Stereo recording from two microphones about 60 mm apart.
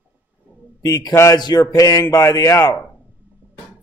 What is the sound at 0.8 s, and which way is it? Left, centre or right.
Speech, left.